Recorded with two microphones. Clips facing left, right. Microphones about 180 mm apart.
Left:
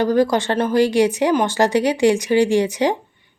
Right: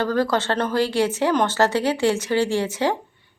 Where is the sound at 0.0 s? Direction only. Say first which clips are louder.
Left 5 dB; 15° left (ahead or behind).